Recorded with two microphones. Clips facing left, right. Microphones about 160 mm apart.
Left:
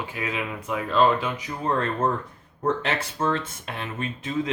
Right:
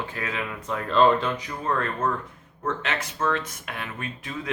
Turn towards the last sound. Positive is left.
turn(degrees=25)  # may be behind; listen again after turning